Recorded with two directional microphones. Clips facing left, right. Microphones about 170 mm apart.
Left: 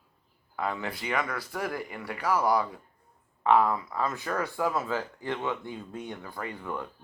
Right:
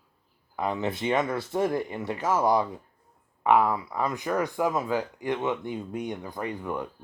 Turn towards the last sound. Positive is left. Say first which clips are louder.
# right 4 dB
turn(degrees=-15)  # may be behind; listen again after turning